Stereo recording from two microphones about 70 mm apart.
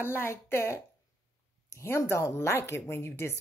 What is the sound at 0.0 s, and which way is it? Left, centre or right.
Speech, left.